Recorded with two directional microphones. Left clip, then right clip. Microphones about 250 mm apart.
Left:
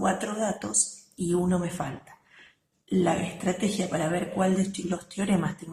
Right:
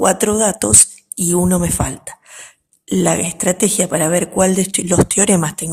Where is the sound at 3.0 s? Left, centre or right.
Right.